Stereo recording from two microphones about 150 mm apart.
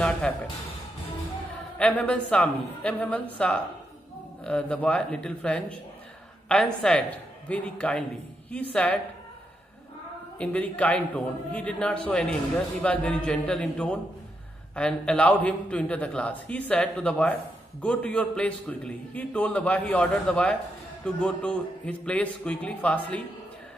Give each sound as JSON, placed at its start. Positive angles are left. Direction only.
{"t": 0.0, "sound": "music", "side_deg": 5}
{"t": 1.8, "sound": "a man's voice", "side_deg": 10}
{"t": 10.4, "sound": "a man's voice", "side_deg": 10}